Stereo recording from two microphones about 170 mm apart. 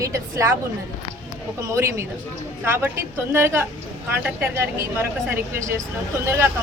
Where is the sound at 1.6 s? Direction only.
15° right (ahead or behind).